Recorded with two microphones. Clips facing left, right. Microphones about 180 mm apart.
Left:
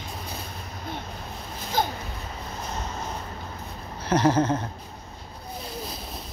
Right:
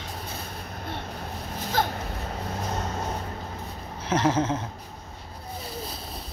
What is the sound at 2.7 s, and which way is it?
Vehicle, 55° right (ahead or behind).